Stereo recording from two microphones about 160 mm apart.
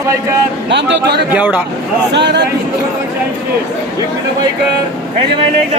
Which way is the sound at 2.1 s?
90° right.